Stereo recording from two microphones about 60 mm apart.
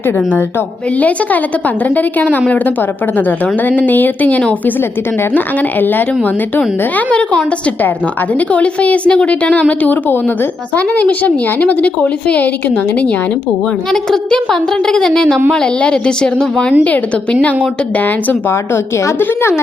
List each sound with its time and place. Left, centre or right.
0.9 s a woman's voice: left
5.8 s a woman's voice: left
6.9 s a woman's voice: left
13.9 s a woman's voice: centre
18.0 s a woman's voice: left
19.2 s a woman's voice: left